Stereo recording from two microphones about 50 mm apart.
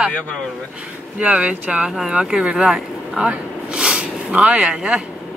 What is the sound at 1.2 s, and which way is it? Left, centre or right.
Speech, right.